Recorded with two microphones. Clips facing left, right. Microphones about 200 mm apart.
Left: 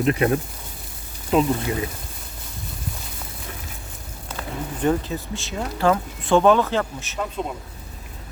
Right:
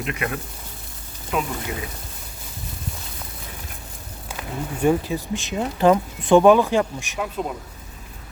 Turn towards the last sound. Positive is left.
turn(degrees=-10)  # may be behind; listen again after turning